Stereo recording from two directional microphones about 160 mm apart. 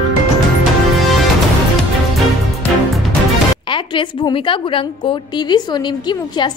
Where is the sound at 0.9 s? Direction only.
Centre (ahead or behind).